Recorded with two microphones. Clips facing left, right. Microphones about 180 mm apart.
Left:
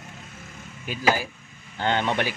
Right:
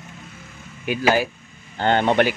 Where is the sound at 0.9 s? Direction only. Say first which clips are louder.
Right 9 dB; 70° right (ahead or behind).